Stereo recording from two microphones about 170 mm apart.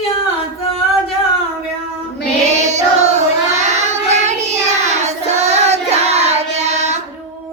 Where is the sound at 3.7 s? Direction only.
40° right (ahead or behind).